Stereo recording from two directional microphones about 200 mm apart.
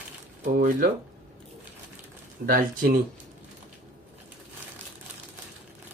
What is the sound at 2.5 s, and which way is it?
Speech, 45° right (ahead or behind).